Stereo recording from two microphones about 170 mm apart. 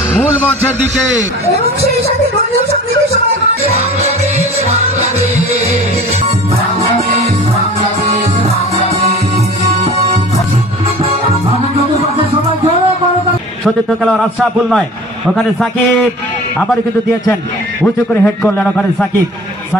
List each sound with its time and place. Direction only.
3.6 s music: 40° right (ahead or behind)
11.1 s music: 35° right (ahead or behind)
13.7 s a man's voice: centre (ahead or behind)
18.2 s a man's voice: 5° left (ahead or behind)